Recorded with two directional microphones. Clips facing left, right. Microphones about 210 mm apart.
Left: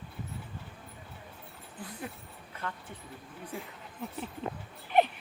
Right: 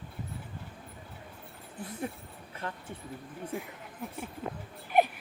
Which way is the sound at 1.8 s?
25° right (ahead or behind).